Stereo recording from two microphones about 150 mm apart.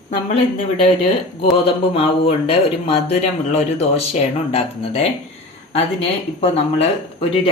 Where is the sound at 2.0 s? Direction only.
40° left (ahead or behind).